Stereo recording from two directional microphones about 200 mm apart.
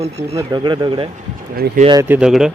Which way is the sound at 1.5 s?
45° right (ahead or behind).